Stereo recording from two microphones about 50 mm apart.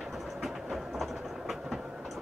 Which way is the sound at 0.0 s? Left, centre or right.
Centre.